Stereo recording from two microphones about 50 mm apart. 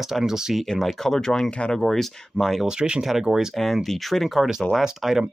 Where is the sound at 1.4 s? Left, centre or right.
Left.